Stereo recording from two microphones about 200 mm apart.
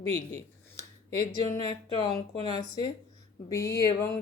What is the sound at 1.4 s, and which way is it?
Speech, 20° left (ahead or behind).